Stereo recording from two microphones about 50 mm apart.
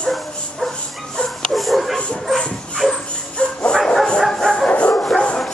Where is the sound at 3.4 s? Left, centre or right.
Left.